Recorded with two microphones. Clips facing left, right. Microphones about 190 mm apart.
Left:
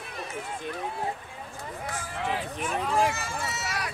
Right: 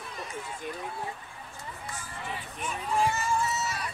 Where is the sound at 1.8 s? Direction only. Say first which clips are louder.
Left 9 dB; 90° left.